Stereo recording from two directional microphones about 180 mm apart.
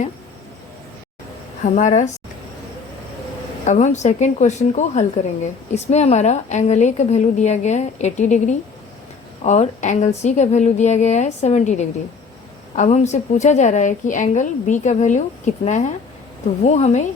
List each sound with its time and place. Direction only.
1.6 s a woman's voice: 45° left (ahead or behind)
3.7 s a woman's voice: 40° left (ahead or behind)